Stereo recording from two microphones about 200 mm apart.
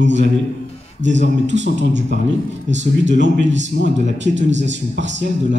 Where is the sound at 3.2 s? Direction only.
65° right (ahead or behind).